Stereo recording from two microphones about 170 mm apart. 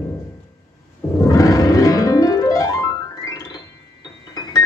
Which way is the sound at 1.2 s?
20° left (ahead or behind).